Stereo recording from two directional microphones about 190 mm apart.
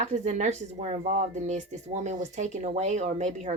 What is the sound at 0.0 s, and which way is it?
Speech, 40° right (ahead or behind).